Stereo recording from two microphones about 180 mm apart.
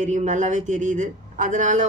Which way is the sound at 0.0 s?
40° right (ahead or behind).